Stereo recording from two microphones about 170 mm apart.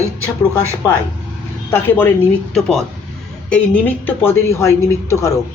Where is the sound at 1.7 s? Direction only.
10° left (ahead or behind).